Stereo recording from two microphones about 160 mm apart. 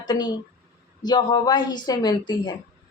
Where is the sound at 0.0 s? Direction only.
25° left (ahead or behind).